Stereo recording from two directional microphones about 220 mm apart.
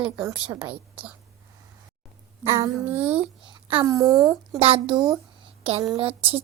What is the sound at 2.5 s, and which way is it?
Speech, 10° right (ahead or behind).